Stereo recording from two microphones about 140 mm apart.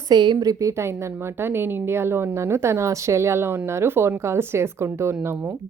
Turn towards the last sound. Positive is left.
turn(degrees=-20)  # may be behind; listen again after turning